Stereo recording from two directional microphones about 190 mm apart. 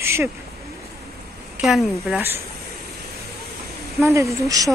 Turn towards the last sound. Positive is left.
turn(degrees=-15)  # may be behind; listen again after turning